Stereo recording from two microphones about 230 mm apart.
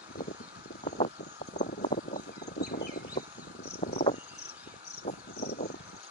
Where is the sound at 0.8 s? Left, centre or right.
Left.